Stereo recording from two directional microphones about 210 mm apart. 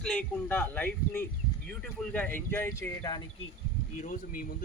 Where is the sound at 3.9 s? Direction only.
35° left (ahead or behind).